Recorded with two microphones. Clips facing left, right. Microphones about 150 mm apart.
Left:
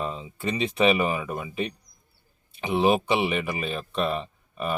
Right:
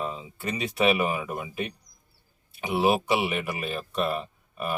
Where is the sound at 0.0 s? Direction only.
5° right (ahead or behind).